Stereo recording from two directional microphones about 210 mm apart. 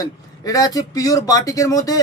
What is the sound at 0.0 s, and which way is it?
A man's voice, 15° left (ahead or behind).